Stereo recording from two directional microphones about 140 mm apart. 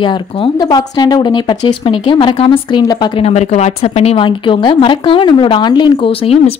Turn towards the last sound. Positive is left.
turn(degrees=40)  # may be behind; listen again after turning